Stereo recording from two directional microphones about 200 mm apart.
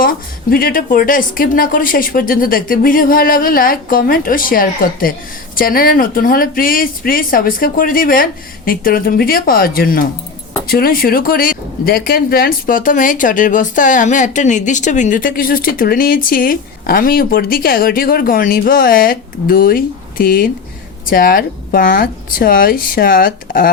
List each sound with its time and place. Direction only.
0.5 s speech: 45° left (ahead or behind)